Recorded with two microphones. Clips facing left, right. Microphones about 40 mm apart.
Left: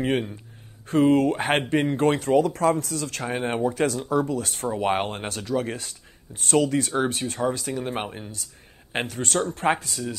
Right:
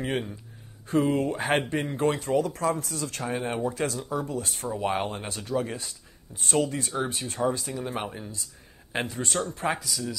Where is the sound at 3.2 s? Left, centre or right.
Left.